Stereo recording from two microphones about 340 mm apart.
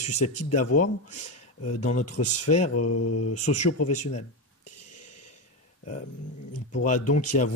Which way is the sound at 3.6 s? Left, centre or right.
Left.